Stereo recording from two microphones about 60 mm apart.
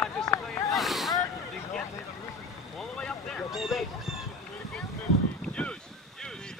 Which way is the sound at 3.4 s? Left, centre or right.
Centre.